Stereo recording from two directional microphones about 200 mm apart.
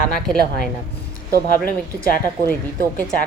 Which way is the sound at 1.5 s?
45° left (ahead or behind).